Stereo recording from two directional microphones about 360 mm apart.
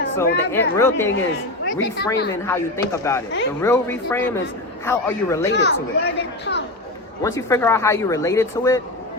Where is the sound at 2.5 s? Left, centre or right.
Centre.